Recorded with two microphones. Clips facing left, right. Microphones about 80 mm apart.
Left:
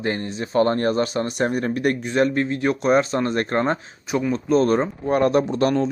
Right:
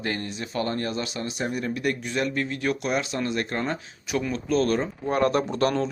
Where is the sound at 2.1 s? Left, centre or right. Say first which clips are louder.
Left 7 dB; left.